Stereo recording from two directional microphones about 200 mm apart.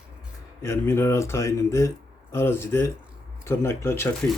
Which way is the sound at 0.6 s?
10° left (ahead or behind).